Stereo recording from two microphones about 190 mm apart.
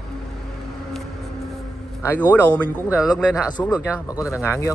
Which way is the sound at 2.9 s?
5° right (ahead or behind).